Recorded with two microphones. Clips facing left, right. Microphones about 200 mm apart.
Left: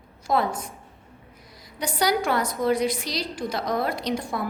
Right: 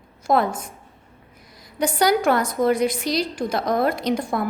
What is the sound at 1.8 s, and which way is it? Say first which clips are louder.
A woman's voice: right 5 dB; 50° right (ahead or behind).